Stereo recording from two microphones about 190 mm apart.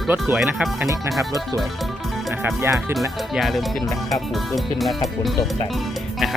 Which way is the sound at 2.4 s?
10° right (ahead or behind).